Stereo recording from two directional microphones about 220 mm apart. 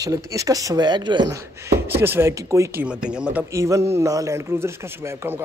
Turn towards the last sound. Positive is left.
turn(degrees=-10)  # may be behind; listen again after turning